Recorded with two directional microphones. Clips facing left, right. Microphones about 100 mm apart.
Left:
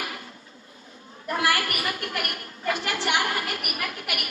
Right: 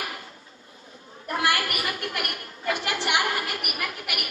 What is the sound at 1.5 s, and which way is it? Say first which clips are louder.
A woman's voice: even; 30° right (ahead or behind).